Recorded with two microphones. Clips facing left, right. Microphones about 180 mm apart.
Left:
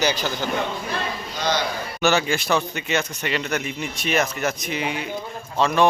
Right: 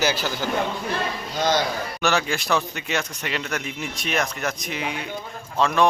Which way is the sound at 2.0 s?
Centre (ahead or behind).